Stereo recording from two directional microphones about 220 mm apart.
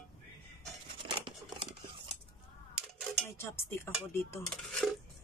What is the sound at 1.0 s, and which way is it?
Scissors, 25° right (ahead or behind).